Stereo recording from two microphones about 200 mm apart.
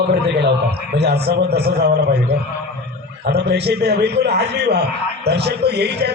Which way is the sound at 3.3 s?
55° right (ahead or behind).